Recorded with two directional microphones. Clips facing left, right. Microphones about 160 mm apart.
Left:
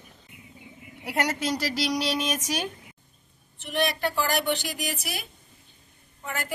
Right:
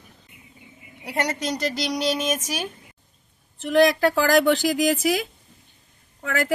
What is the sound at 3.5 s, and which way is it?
Speech, 90° right.